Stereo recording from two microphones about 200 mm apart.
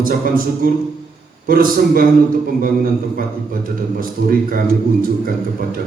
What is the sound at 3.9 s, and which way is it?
Speech, 45° right (ahead or behind).